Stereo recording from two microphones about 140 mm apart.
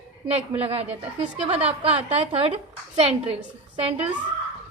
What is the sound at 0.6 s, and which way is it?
A woman's voice, 45° right (ahead or behind).